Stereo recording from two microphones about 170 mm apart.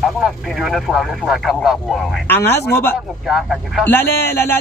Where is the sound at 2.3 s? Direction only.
15° left (ahead or behind).